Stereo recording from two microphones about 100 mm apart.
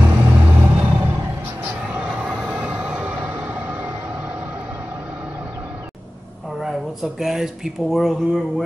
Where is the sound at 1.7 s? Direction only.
10° right (ahead or behind).